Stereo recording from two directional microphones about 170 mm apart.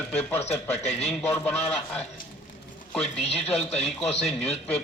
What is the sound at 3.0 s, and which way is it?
Speech, 35° left (ahead or behind).